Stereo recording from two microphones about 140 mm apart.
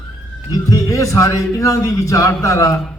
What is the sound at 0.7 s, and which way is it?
A man's voice, 20° left (ahead or behind).